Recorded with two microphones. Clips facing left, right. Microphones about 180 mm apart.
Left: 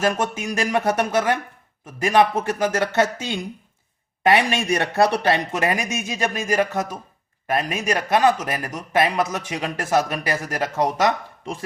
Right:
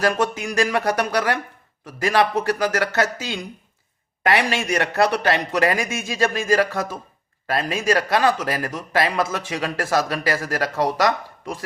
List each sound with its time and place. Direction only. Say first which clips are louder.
0.0 s speech: right 1 dB; 20° left (ahead or behind)